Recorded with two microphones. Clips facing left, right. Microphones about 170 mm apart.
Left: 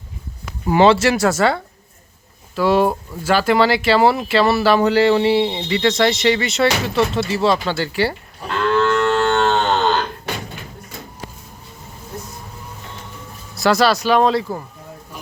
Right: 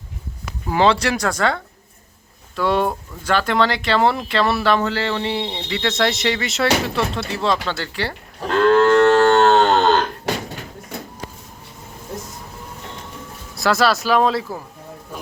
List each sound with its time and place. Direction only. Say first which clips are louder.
0.7 s speech: left 4 dB; 5° left (ahead or behind)
8.4 s cattle: right 4 dB; 50° right (ahead or behind)
13.6 s speech: left 2 dB; centre (ahead or behind)